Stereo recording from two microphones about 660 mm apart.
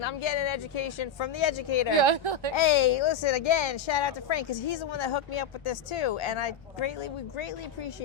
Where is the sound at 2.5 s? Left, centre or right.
Left.